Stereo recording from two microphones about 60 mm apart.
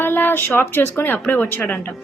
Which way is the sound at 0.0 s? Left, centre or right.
Left.